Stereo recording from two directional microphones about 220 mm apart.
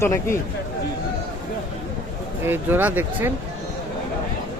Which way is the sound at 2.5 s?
10° right (ahead or behind).